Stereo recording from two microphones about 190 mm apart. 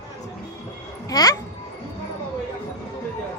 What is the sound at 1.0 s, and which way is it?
Speech, 20° left (ahead or behind).